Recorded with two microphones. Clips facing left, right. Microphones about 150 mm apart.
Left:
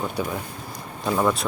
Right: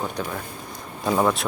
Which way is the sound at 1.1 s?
5° right (ahead or behind).